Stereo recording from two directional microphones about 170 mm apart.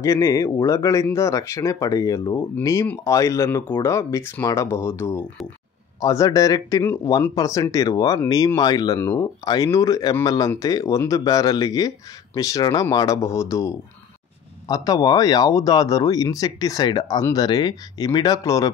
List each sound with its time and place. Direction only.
0.0 s speech: 20° left (ahead or behind)